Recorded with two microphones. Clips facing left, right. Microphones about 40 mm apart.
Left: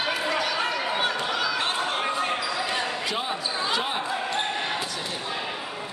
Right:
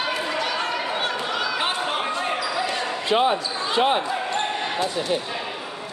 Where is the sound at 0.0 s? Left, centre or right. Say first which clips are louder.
Right 1 dB; centre.